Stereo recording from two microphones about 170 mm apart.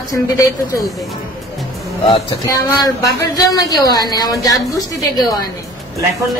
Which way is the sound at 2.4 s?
20° left (ahead or behind).